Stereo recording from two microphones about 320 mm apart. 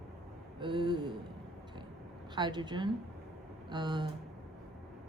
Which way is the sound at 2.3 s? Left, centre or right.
Centre.